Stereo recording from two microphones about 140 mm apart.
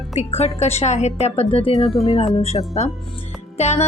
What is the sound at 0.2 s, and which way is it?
Speech, 50° left (ahead or behind).